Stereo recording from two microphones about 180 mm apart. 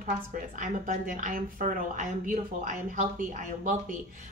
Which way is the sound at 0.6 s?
45° right (ahead or behind).